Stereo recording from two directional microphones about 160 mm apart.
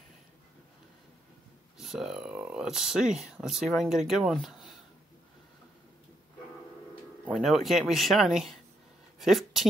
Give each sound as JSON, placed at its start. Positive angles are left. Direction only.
{"t": 1.8, "sound": "speech", "side_deg": 0}
{"t": 7.3, "sound": "speech", "side_deg": 0}